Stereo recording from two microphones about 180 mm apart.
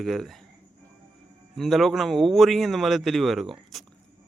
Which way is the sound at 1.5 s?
Centre (ahead or behind).